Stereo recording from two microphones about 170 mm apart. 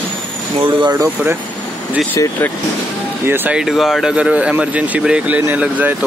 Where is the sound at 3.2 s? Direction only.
10° right (ahead or behind).